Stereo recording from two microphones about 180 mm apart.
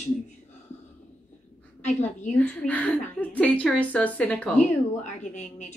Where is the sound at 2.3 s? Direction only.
5° left (ahead or behind).